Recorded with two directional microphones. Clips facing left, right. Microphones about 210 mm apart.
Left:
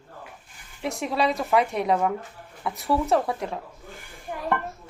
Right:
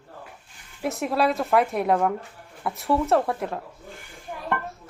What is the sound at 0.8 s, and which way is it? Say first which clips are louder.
A woman's voice: right 2 dB; centre (ahead or behind).